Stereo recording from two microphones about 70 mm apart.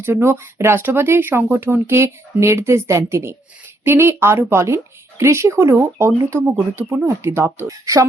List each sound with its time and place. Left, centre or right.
0.0 s speech: right